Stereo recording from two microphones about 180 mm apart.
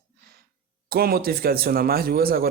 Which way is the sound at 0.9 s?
55° right (ahead or behind).